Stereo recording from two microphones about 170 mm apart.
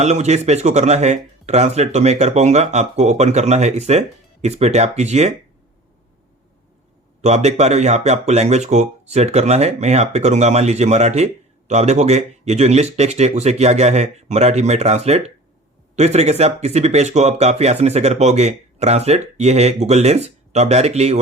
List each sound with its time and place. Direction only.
0.0 s speech: 40° right (ahead or behind)
7.2 s speech: 40° right (ahead or behind)